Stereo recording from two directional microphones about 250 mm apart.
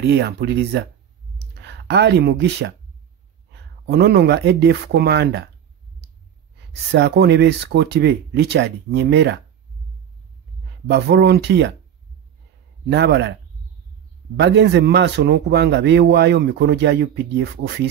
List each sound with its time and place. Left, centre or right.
0.0 s speech: right
3.8 s speech: right
6.9 s a man's voice: right
10.9 s a man's voice: right
12.9 s a man's voice: right
14.4 s a man's voice: right